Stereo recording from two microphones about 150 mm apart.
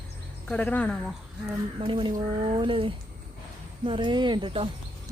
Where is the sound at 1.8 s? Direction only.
35° right (ahead or behind).